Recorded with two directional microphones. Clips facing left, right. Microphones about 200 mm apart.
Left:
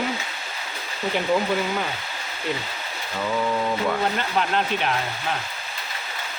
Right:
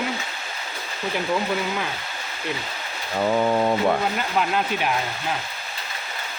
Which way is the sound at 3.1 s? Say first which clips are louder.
Right 4 dB; 40° right (ahead or behind).